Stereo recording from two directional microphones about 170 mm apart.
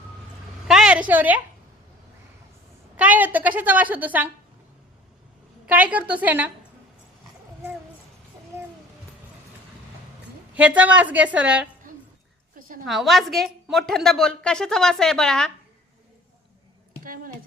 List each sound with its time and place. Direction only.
0.7 s a woman's voice: 5° right (ahead or behind)
3.0 s a woman's voice: 10° right (ahead or behind)
5.6 s a woman's voice: 10° right (ahead or behind)
8.5 s a sound: 15° right (ahead or behind)
10.5 s a woman's voice: 5° right (ahead or behind)
12.5 s a sound: 55° right (ahead or behind)
12.8 s a woman's voice: centre (ahead or behind)
17.0 s a woman's voice: 55° right (ahead or behind)